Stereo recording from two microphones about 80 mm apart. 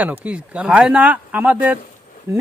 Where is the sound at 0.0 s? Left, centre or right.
Centre.